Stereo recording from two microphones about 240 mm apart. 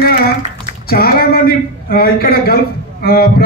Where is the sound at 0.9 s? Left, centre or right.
Left.